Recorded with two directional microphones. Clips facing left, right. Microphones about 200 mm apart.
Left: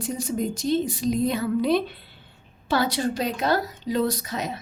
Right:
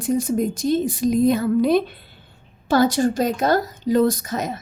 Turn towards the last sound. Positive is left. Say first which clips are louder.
# right 4 dB
turn(degrees=-45)  # may be behind; listen again after turning